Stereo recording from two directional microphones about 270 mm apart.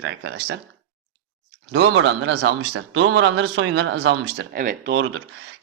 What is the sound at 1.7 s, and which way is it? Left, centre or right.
Speech, right.